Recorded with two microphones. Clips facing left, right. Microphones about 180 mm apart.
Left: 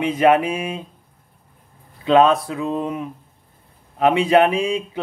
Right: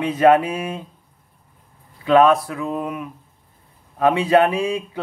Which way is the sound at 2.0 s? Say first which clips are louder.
Even; 20° left (ahead or behind).